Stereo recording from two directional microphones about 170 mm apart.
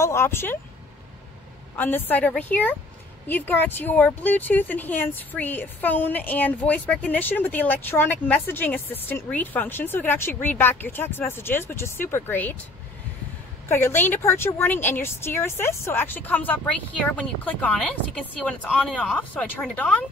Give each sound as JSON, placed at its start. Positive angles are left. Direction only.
{"t": 0.0, "sound": "speech", "side_deg": 15}
{"t": 1.8, "sound": "speech", "side_deg": 10}
{"t": 13.7, "sound": "speech", "side_deg": 15}